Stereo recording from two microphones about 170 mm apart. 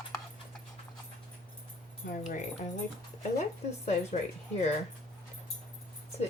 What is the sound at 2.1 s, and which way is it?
Speech, 45° left (ahead or behind).